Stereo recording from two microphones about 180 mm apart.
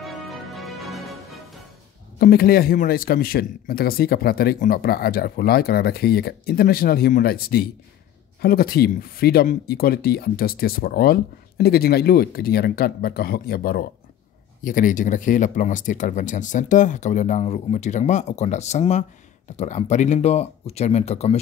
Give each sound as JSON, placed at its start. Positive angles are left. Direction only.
{"t": 0.0, "sound": "music", "side_deg": 0}
{"t": 2.1, "sound": "speech", "side_deg": 55}